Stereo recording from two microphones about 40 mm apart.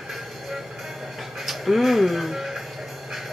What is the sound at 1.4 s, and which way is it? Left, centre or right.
Music, centre.